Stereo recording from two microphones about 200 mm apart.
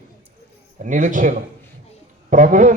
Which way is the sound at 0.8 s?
40° right (ahead or behind).